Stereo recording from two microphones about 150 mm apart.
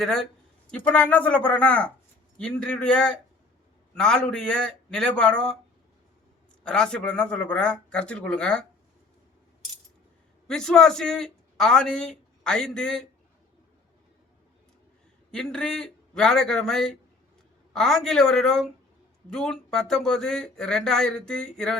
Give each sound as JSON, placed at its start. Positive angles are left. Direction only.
{"t": 0.0, "sound": "a man's voice", "side_deg": 5}
{"t": 6.7, "sound": "speech", "side_deg": 5}
{"t": 10.5, "sound": "a man's voice", "side_deg": 5}
{"t": 15.3, "sound": "a man's voice", "side_deg": 5}